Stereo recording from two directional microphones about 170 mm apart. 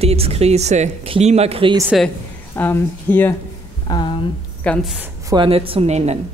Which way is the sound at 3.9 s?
25° left (ahead or behind).